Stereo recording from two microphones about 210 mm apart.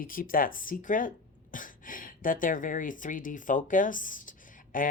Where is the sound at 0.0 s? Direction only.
40° left (ahead or behind).